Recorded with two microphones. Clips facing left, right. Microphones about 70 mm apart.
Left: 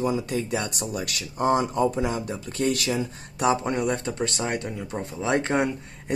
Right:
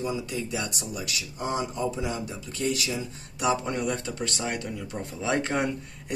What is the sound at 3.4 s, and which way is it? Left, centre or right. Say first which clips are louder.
Speech: left 3 dB; left.